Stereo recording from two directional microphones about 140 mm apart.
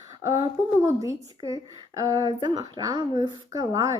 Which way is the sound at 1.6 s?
30° right (ahead or behind).